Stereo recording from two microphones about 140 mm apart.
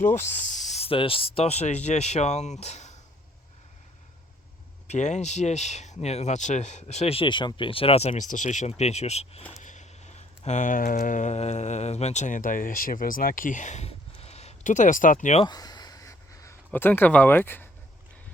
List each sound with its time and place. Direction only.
0.0 s speech: 65° left (ahead or behind)
4.9 s speech: 55° left (ahead or behind)
15.4 s a sound: 30° left (ahead or behind)